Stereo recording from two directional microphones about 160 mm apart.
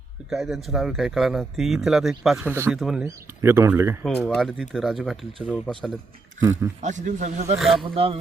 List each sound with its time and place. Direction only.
0.3 s speech: centre (ahead or behind)
2.5 s speech: 15° right (ahead or behind)
2.7 s speech: 5° right (ahead or behind)
3.4 s speech: 15° right (ahead or behind)
4.2 s speech: 5° left (ahead or behind)
6.4 s speech: 15° right (ahead or behind)
6.8 s speech: 50° right (ahead or behind)
7.6 s speech: centre (ahead or behind)
7.9 s a sound: 35° right (ahead or behind)